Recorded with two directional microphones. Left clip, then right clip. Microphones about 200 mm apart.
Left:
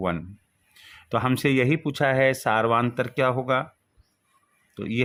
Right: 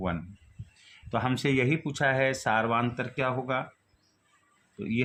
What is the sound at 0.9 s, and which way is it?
Speech, 40° left (ahead or behind).